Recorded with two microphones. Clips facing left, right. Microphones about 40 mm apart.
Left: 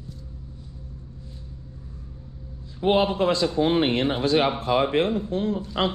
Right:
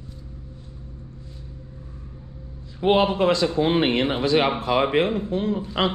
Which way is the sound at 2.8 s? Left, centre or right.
Right.